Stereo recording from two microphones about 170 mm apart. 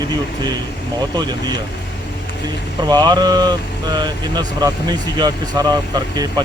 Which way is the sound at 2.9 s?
25° right (ahead or behind).